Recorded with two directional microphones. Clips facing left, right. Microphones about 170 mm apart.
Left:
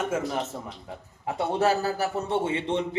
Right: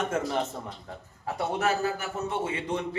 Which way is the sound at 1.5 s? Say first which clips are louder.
Left 3 dB; 30° left (ahead or behind).